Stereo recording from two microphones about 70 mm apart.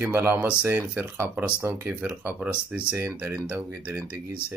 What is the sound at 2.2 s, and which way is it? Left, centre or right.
Speech, right.